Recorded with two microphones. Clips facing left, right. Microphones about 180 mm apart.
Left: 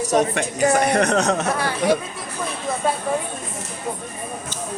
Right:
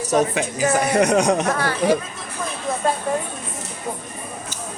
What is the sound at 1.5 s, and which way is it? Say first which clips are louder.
Speech: right 1 dB; 15° left (ahead or behind).